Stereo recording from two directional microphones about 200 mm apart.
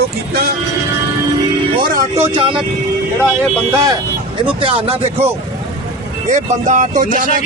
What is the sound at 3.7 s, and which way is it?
Speech, 15° right (ahead or behind).